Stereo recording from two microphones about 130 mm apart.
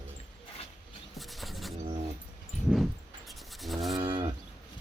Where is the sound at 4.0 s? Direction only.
35° right (ahead or behind).